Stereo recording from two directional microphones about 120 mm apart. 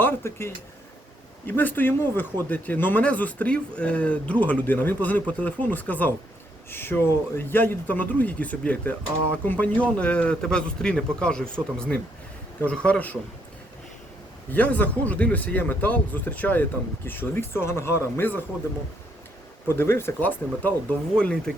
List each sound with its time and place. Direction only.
0.0 s speech: 20° left (ahead or behind)
14.5 s speech: 15° left (ahead or behind)
19.6 s speech: 20° left (ahead or behind)